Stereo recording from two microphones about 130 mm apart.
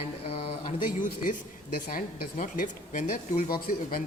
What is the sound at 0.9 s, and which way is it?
Speech, 90° left.